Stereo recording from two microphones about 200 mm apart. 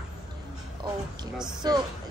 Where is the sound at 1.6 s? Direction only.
20° right (ahead or behind).